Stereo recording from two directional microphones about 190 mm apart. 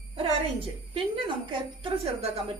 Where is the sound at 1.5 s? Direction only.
25° right (ahead or behind).